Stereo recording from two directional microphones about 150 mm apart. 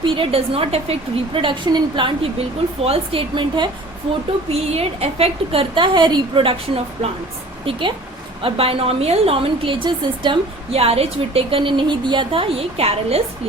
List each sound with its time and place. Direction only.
0.0 s a woman's voice: 35° right (ahead or behind)
4.7 s a woman's voice: 40° right (ahead or behind)